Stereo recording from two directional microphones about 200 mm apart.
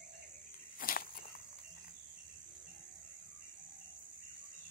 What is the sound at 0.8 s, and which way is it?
Walk, 45° left (ahead or behind).